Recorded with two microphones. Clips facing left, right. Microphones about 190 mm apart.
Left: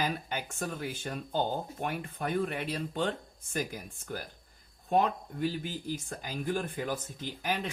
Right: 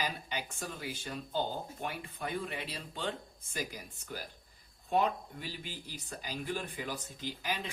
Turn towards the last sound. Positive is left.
turn(degrees=50)  # may be behind; listen again after turning